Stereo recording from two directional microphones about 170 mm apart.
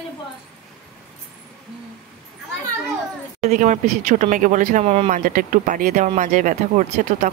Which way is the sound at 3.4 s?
45° right (ahead or behind).